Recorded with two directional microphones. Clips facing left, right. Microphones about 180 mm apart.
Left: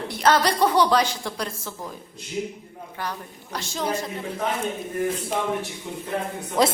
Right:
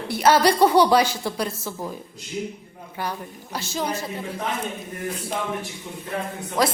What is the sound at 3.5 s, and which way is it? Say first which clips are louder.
Speech: even; 5° right (ahead or behind).